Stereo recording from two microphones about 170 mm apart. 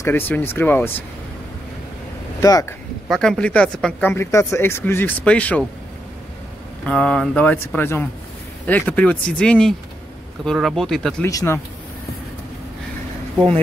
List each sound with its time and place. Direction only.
0.0 s speech: 10° left (ahead or behind)
2.4 s speech: 20° left (ahead or behind)
3.1 s speech: 5° left (ahead or behind)
6.9 s speech: 5° left (ahead or behind)
11.2 s speech: 15° left (ahead or behind)